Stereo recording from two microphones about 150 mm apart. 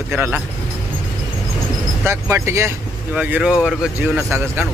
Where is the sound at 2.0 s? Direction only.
20° right (ahead or behind); by 4.3 s centre (ahead or behind).